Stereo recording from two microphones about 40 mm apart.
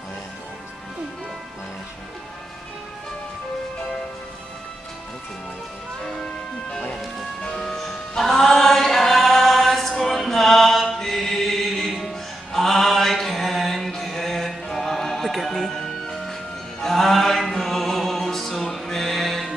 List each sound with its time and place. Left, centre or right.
6.7 s music: left
8.2 s chant: centre
16.8 s music: centre